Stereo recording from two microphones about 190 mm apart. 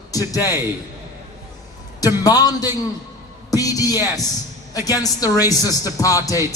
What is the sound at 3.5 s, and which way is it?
Music, 20° left (ahead or behind).